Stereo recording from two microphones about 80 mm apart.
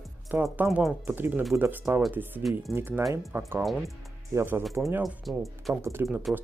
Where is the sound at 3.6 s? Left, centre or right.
Centre.